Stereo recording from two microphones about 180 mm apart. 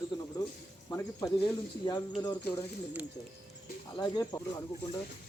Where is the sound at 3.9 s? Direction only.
25° left (ahead or behind).